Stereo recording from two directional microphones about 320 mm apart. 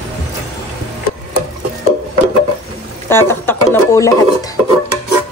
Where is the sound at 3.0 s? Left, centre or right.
Centre.